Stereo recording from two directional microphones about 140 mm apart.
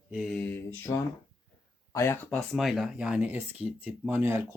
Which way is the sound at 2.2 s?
5° left (ahead or behind).